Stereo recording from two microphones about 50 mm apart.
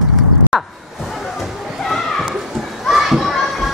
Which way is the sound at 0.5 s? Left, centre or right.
Centre.